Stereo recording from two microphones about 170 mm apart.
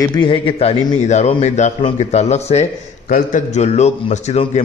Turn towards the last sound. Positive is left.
turn(degrees=40)  # may be behind; listen again after turning